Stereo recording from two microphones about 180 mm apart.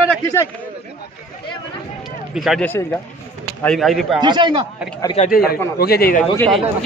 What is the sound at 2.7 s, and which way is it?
A man's voice, 10° left (ahead or behind).